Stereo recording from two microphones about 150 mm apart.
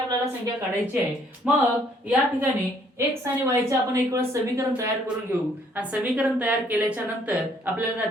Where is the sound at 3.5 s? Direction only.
20° right (ahead or behind).